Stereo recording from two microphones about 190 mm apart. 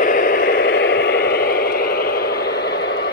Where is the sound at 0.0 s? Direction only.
45° left (ahead or behind).